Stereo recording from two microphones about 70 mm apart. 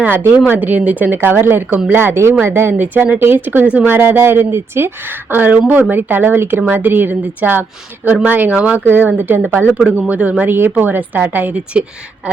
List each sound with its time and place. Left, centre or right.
0.0 s speech: right
5.3 s speech: right